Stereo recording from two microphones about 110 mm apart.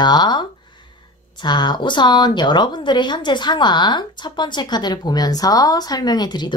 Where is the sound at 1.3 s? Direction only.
45° left (ahead or behind).